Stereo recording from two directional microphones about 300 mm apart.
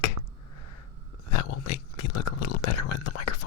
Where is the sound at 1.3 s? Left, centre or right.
Left.